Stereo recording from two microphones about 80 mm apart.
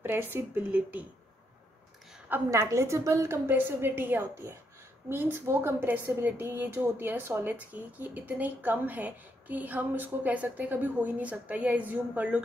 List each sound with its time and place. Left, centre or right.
0.0 s a woman's voice: right
2.5 s a woman's voice: right
3.4 s a woman's voice: right